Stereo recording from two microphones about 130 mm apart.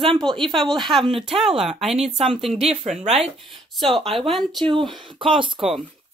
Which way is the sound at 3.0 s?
55° right (ahead or behind).